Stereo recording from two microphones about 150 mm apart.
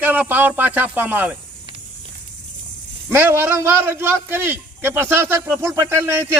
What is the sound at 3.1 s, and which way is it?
A man's voice, 15° right (ahead or behind).